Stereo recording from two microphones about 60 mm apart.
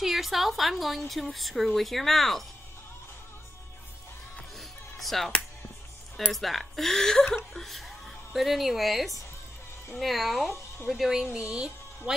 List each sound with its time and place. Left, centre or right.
0.0 s a woman's voice: centre
4.6 s music: centre
6.3 s a woman's voice: centre
11.3 s speech: centre